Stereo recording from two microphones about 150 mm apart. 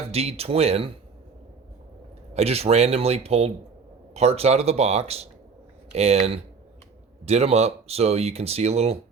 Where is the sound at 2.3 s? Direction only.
45° right (ahead or behind).